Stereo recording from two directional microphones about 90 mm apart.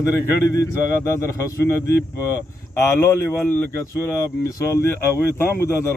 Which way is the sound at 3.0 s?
30° left (ahead or behind).